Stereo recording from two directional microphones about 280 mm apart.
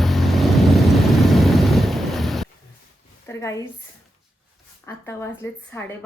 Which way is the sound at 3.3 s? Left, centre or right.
Centre.